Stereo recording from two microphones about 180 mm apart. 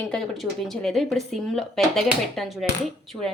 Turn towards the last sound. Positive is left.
turn(degrees=0)  # may be behind; listen again after turning